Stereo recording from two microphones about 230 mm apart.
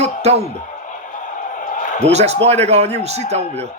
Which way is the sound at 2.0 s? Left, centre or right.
Right.